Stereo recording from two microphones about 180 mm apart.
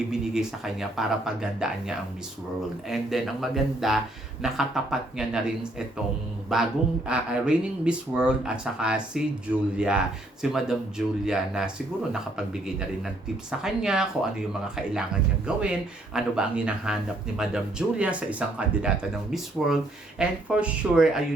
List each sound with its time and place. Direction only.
0.1 s speech: centre (ahead or behind)
13.5 s speech: 5° right (ahead or behind)